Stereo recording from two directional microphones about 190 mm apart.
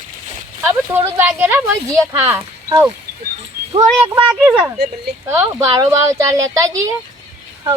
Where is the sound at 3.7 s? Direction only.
25° right (ahead or behind).